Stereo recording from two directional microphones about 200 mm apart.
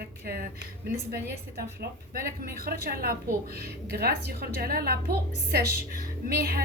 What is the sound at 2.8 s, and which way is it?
A woman's voice, 50° right (ahead or behind).